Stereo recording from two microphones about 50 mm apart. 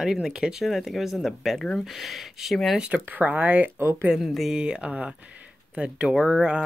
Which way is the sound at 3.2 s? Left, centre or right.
Right.